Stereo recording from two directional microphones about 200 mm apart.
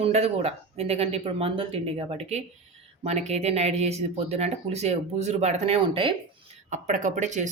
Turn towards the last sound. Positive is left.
turn(degrees=-35)  # may be behind; listen again after turning